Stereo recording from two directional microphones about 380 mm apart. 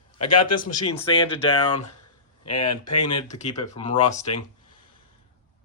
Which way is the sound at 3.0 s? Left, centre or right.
Centre.